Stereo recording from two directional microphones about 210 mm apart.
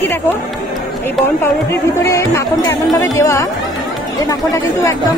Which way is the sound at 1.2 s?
10° left (ahead or behind).